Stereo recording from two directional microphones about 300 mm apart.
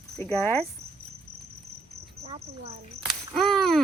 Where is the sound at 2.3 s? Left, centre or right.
Right.